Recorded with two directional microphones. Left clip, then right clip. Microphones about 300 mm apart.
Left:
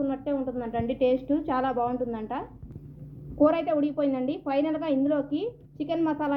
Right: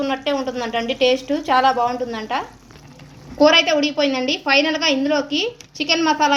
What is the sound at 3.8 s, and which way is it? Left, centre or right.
A woman's voice, centre.